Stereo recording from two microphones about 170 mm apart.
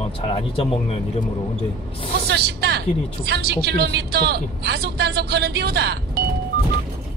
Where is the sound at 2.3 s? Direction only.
75° right (ahead or behind).